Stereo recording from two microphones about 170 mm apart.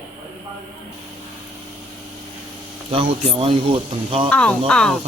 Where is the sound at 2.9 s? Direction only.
30° right (ahead or behind).